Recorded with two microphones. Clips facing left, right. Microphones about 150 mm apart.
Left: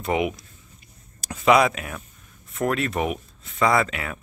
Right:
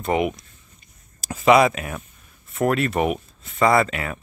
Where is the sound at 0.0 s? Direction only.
Centre (ahead or behind).